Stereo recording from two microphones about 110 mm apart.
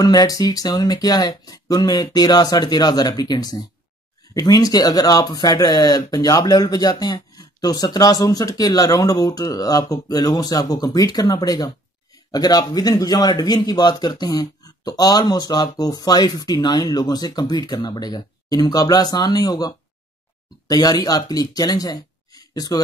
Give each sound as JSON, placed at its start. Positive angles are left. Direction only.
{"t": 0.0, "sound": "a man's voice", "side_deg": 35}